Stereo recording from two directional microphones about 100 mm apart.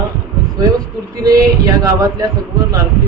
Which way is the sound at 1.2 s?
35° right (ahead or behind).